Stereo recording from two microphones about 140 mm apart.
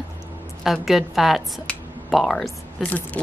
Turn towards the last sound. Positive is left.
turn(degrees=10)  # may be behind; listen again after turning